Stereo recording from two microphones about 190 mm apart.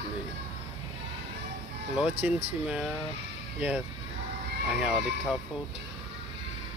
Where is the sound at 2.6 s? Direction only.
5° right (ahead or behind).